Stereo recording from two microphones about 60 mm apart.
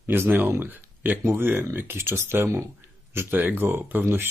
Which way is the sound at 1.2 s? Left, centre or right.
Right.